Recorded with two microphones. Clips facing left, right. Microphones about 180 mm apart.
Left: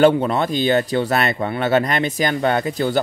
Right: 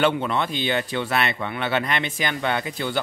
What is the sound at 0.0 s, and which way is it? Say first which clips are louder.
Speech: left 7 dB; 40° left (ahead or behind).